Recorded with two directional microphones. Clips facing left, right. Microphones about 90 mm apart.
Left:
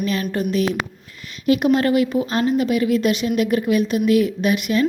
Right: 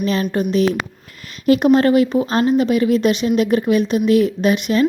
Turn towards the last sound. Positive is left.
turn(degrees=-30)  # may be behind; listen again after turning